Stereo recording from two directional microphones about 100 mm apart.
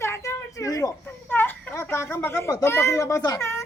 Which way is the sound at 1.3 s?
20° left (ahead or behind).